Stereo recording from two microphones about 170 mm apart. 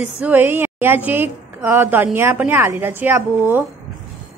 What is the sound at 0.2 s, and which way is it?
A woman's voice, 10° right (ahead or behind).